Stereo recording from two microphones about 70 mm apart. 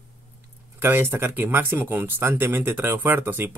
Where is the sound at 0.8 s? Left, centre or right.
Right.